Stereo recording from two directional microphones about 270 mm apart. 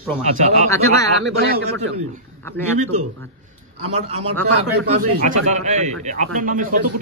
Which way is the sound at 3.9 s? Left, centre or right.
Right.